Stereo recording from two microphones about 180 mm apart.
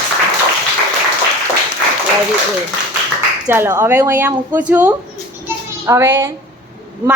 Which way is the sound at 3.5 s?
15° right (ahead or behind).